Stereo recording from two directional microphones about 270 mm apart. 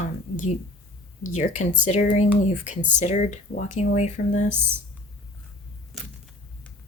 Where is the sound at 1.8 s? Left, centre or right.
Left.